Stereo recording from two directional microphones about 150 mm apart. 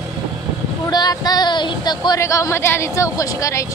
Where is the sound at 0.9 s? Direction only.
25° left (ahead or behind).